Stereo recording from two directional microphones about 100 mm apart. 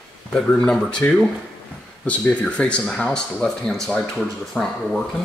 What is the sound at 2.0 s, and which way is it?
Speech, 10° left (ahead or behind).